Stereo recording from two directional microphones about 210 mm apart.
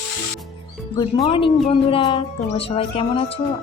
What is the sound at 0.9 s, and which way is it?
Speech, 25° left (ahead or behind).